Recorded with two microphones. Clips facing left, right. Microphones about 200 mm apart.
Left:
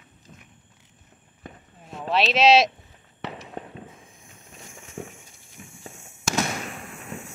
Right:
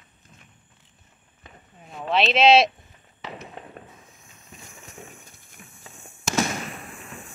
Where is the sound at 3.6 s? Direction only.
45° left (ahead or behind).